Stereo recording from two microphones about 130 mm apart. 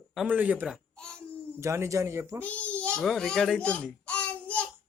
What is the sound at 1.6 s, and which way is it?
Speech, 20° right (ahead or behind).